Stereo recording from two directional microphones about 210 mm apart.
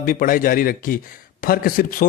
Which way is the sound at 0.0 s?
40° left (ahead or behind).